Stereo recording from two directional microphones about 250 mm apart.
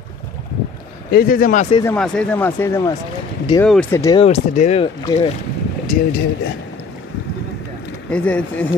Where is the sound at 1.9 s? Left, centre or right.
Centre.